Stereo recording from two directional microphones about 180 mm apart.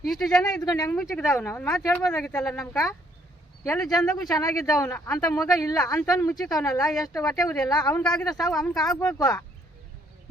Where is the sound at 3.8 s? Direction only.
Centre (ahead or behind).